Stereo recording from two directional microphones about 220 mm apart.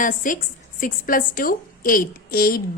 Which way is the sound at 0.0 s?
40° left (ahead or behind).